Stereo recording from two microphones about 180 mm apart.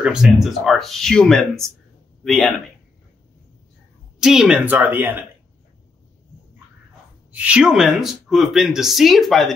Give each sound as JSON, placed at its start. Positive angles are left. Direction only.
{"t": 0.0, "sound": "speech", "side_deg": -5}
{"t": 4.2, "sound": "speech", "side_deg": -5}
{"t": 7.4, "sound": "speech", "side_deg": -5}